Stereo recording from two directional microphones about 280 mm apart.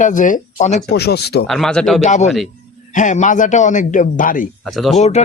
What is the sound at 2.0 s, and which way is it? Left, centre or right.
Speech, left.